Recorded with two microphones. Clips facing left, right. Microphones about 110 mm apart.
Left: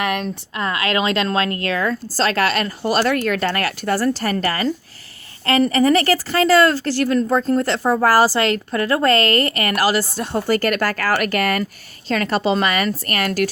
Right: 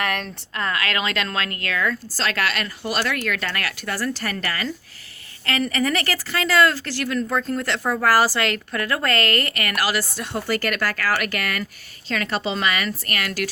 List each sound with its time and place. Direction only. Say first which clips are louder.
0.0 s a woman's voice: left 4 dB; 10° left (ahead or behind); by 13.5 s 40° left (ahead or behind)